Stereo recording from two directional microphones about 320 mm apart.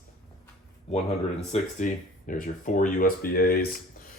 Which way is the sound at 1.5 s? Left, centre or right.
Left.